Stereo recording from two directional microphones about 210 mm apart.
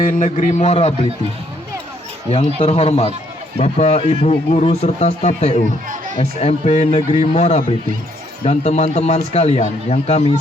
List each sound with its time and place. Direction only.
0.0 s speech: 35° left (ahead or behind)
2.6 s a man's voice: 30° left (ahead or behind)